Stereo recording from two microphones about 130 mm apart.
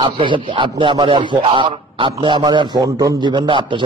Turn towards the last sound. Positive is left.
turn(degrees=-40)  # may be behind; listen again after turning